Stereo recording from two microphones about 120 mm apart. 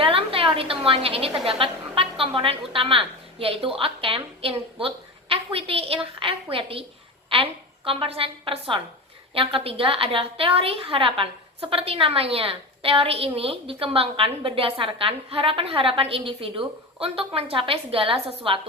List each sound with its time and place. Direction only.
0.0 s a woman's voice: 50° right (ahead or behind)
7.9 s a woman's voice: 50° right (ahead or behind)